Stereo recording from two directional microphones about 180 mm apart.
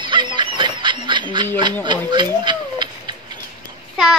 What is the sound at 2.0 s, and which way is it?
Tick-tock, 25° right (ahead or behind).